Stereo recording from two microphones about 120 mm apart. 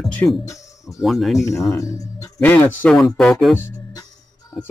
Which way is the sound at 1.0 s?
Centre (ahead or behind).